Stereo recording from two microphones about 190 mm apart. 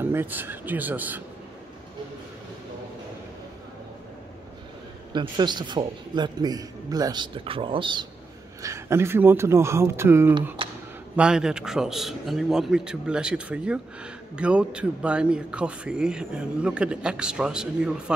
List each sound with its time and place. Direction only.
0.0 s speech: 10° right (ahead or behind)
5.1 s a man's voice: 25° right (ahead or behind)
8.6 s a man's voice: 15° right (ahead or behind)